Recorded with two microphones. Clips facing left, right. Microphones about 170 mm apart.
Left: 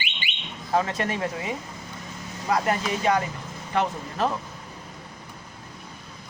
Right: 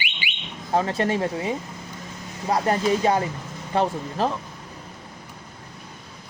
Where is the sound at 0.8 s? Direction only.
30° right (ahead or behind).